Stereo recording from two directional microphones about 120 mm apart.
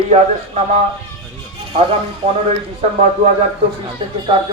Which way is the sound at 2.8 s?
60° right (ahead or behind).